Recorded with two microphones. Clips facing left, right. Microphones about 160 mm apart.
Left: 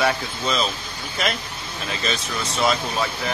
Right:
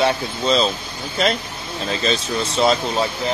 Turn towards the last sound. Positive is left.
turn(degrees=-30)  # may be behind; listen again after turning